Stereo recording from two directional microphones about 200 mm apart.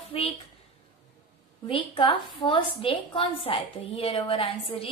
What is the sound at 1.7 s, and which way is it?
A woman's voice, 25° left (ahead or behind).